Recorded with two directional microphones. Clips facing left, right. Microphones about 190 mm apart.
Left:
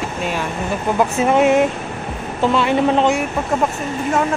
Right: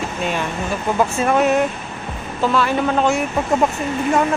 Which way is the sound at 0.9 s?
20° left (ahead or behind).